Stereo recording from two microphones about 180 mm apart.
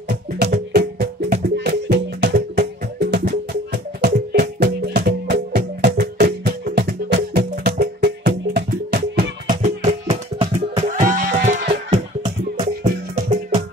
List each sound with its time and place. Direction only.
0.1 s music: 60° right (ahead or behind)
9.6 s music: 35° right (ahead or behind)
10.9 s music: 45° right (ahead or behind)